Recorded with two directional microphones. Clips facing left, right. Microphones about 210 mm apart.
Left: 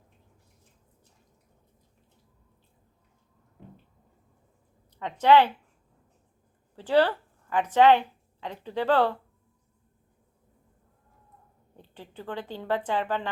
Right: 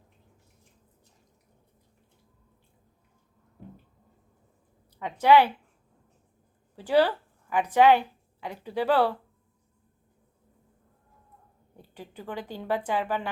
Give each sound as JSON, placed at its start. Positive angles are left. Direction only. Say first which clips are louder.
{"t": 4.9, "sound": "a woman's voice", "louder": "even", "side_deg": -10}
{"t": 6.7, "sound": "a woman's voice", "louder": "even", "side_deg": -10}
{"t": 11.8, "sound": "a woman's voice", "louder": "even", "side_deg": -10}